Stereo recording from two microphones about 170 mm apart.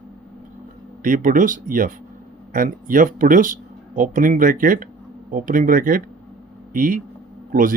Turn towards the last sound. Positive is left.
turn(degrees=-55)  # may be behind; listen again after turning